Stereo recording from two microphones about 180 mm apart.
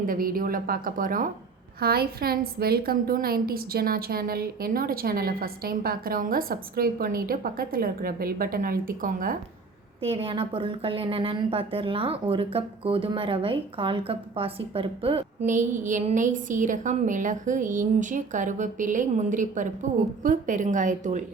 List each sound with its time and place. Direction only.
0.0 s a woman's voice: 50° right (ahead or behind)
1.8 s a woman's voice: 60° right (ahead or behind)
10.0 s a woman's voice: 30° right (ahead or behind)